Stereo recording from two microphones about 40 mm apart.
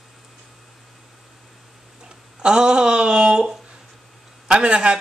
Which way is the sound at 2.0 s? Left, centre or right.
Right.